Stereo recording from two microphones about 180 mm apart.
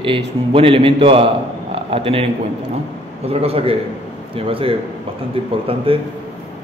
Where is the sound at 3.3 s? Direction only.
35° right (ahead or behind).